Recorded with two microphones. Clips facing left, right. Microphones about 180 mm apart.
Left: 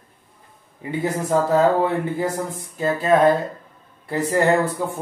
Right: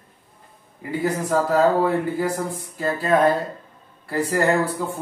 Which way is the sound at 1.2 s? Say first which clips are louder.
Left 2 dB; 25° left (ahead or behind).